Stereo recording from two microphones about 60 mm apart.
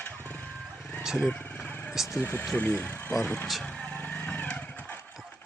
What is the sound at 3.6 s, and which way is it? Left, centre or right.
Vehicle, centre.